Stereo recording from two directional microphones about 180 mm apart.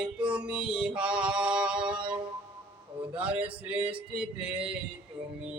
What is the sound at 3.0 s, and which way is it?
Speech, 5° right (ahead or behind).